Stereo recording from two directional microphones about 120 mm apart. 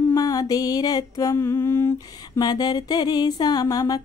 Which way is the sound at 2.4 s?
35° left (ahead or behind).